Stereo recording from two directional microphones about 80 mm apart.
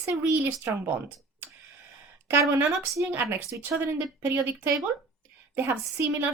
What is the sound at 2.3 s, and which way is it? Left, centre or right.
A woman's voice, right.